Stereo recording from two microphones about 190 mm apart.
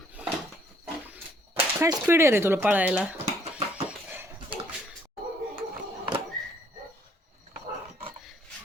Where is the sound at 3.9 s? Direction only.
10° right (ahead or behind).